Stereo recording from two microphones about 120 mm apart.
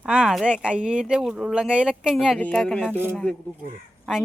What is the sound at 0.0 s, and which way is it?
Speech, 5° right (ahead or behind).